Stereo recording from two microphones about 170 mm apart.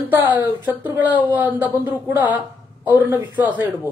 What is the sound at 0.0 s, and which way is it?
Speech, 10° right (ahead or behind).